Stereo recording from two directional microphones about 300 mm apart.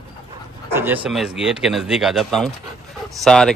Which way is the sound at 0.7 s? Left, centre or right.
Centre.